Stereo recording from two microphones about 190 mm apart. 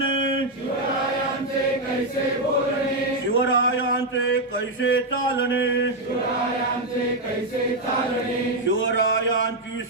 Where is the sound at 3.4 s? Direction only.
90° left.